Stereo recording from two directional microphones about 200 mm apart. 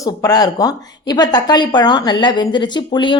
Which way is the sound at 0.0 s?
20° left (ahead or behind).